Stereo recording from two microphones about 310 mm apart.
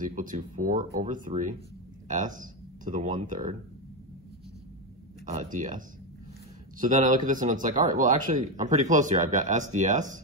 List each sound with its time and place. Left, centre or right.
0.0 s speech: right
5.2 s speech: right